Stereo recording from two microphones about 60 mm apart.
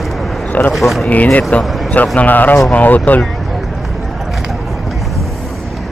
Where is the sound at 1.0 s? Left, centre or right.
Left.